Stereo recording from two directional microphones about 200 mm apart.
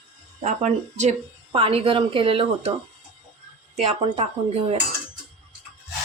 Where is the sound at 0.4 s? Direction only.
35° right (ahead or behind).